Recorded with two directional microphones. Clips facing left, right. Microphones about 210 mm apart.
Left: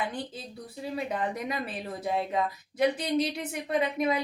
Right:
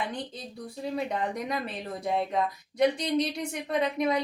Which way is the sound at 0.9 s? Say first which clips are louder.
Even; 5° left (ahead or behind).